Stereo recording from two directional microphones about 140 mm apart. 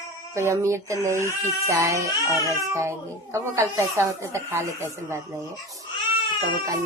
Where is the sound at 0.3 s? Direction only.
20° right (ahead or behind).